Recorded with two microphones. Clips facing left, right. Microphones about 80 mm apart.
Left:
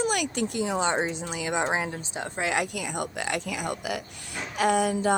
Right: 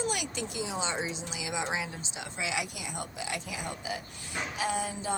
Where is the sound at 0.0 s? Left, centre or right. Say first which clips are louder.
Left 7 dB; left.